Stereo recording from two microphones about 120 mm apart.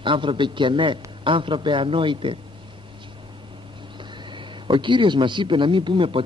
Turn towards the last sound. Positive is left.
turn(degrees=-45)  # may be behind; listen again after turning